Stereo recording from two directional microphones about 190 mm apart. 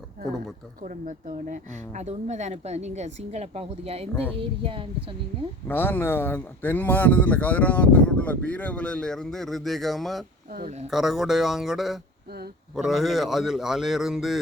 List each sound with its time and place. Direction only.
0.8 s speech: 45° right (ahead or behind); by 4.9 s 30° right (ahead or behind)
5.6 s speech: 10° left (ahead or behind)
10.5 s speech: 50° right (ahead or behind)
10.9 s speech: centre (ahead or behind)